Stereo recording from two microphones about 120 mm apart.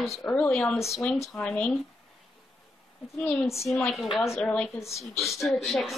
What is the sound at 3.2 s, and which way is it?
Speech, 15° left (ahead or behind).